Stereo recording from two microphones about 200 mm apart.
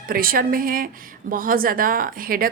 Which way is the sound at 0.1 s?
45° right (ahead or behind).